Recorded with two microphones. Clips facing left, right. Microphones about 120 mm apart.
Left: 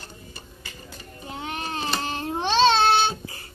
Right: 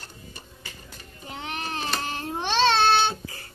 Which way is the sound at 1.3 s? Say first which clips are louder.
Left 2 dB; 20° left (ahead or behind).